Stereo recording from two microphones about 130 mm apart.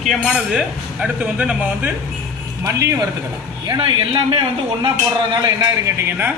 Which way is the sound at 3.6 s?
35° right (ahead or behind).